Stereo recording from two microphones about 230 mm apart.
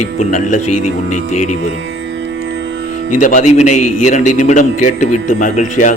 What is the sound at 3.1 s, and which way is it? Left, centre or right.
Speech, left.